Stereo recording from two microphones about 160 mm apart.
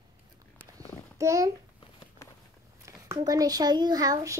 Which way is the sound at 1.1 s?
20° right (ahead or behind).